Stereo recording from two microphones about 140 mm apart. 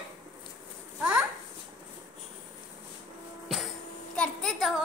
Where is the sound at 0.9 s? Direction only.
10° right (ahead or behind).